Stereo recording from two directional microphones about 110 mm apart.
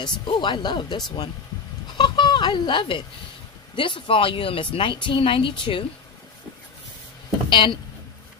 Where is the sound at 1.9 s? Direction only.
45° left (ahead or behind).